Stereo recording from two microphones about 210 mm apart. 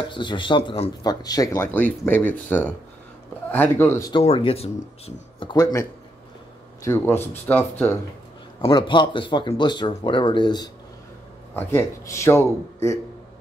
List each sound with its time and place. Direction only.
0.1 s speech: 20° left (ahead or behind)
4.1 s speech: 25° left (ahead or behind); by 7.9 s 10° left (ahead or behind)
8.5 s speech: 20° left (ahead or behind)